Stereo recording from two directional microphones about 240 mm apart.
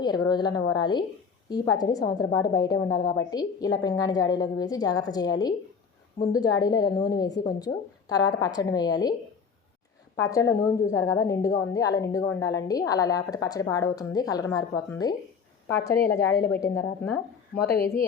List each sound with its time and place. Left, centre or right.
0.0 s a woman's voice: centre
10.2 s a woman's voice: centre
16.5 s a woman's voice: centre
17.5 s speech: left